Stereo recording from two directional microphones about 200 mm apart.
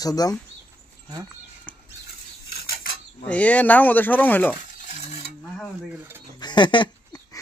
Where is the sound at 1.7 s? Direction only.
5° left (ahead or behind).